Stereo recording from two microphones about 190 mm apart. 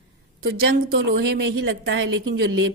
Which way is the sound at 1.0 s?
60° right (ahead or behind).